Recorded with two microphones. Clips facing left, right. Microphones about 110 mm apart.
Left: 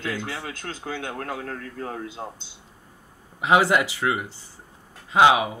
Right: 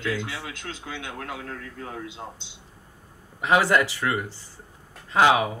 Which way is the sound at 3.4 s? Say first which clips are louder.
Left 1 dB; 15° left (ahead or behind).